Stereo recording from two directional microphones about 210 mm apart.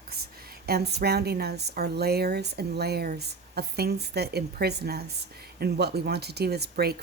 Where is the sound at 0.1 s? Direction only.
50° right (ahead or behind).